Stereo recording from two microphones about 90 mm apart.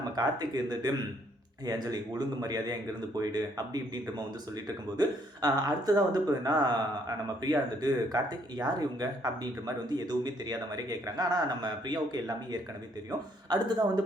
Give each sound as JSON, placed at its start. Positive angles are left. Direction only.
{"t": 0.2, "sound": "speech", "side_deg": -45}